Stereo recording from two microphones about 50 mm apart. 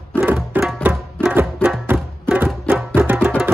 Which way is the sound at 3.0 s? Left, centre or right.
Right.